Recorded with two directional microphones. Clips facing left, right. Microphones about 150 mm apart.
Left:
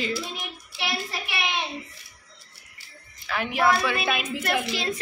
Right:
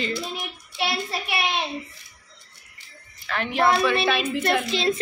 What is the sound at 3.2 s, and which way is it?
Speech, 10° left (ahead or behind).